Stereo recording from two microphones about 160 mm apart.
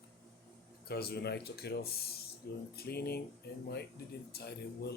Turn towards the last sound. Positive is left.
turn(degrees=90)